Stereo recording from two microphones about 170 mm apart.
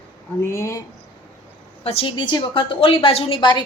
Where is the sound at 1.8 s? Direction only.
30° left (ahead or behind).